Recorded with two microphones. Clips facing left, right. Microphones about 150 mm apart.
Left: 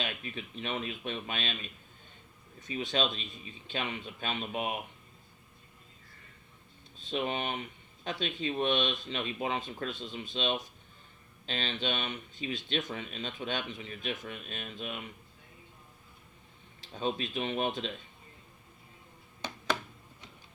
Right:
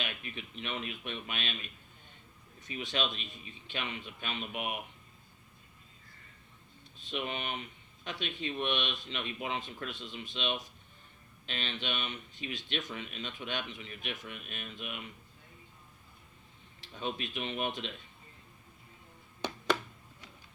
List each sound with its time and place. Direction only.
0.0 s speech: 35° left (ahead or behind)
2.7 s speech: 35° left (ahead or behind)
7.1 s speech: 35° left (ahead or behind)
16.9 s speech: 35° left (ahead or behind)